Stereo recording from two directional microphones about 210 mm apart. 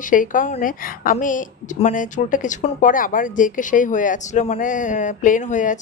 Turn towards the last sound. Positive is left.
turn(degrees=35)  # may be behind; listen again after turning